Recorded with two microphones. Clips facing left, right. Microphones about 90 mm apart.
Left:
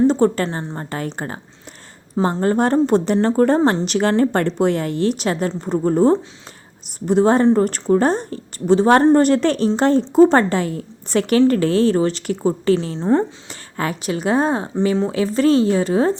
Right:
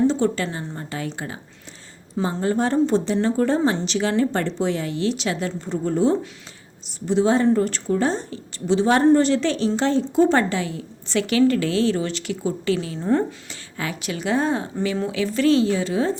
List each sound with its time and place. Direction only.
0.1 s a woman's voice: 50° left (ahead or behind)
0.4 s a woman's voice: 35° left (ahead or behind)
13.5 s a woman's voice: 45° left (ahead or behind); by 15.0 s 30° left (ahead or behind)
15.0 s a woman's voice: 40° left (ahead or behind)